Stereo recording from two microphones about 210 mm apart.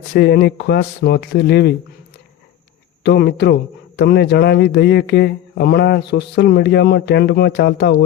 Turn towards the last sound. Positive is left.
turn(degrees=55)  # may be behind; listen again after turning